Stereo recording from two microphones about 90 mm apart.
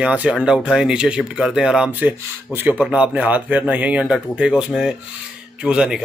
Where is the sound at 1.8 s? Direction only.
20° right (ahead or behind).